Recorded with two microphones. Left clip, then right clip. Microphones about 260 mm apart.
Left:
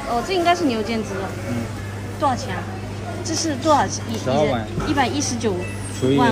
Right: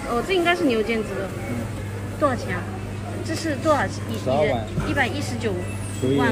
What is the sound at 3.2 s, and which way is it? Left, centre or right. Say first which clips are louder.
Speech: left 3 dB; centre.